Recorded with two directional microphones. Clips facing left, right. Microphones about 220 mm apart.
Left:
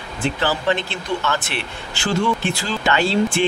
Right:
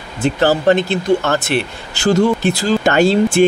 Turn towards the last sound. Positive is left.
turn(degrees=-45)  # may be behind; listen again after turning